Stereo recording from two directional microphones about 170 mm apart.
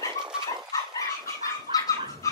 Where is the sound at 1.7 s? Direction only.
20° left (ahead or behind).